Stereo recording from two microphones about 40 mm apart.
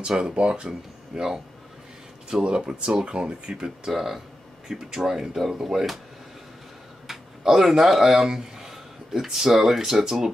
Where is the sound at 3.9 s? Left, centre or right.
Centre.